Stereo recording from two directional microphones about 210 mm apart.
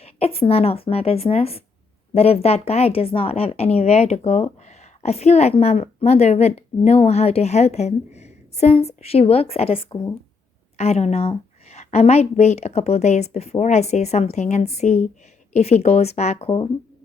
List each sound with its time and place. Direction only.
0.0 s a woman's voice: 30° left (ahead or behind)